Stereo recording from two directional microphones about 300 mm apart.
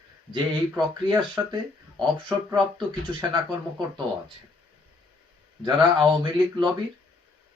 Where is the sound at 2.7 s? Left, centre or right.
Centre.